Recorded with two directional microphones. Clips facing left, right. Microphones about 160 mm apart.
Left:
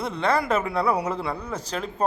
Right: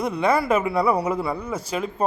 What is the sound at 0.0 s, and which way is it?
A man's voice, 10° right (ahead or behind).